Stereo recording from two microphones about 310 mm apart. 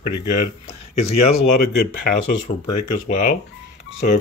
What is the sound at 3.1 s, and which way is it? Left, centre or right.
Speech, left.